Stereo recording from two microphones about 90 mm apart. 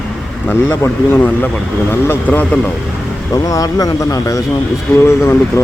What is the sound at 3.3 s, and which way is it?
Speech, 40° left (ahead or behind).